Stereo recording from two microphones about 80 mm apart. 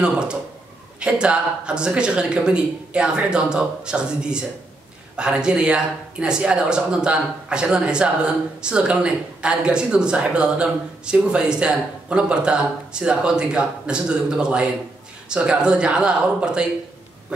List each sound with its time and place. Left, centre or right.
0.0 s speech: centre